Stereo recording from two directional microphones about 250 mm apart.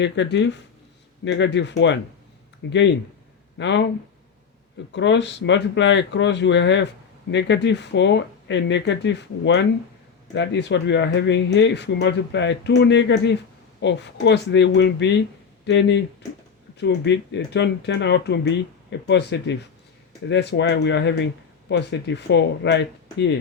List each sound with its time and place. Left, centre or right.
0.0 s speech: left
4.9 s speech: left